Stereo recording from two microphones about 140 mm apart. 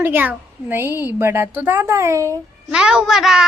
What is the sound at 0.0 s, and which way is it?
A child's voice, 15° right (ahead or behind).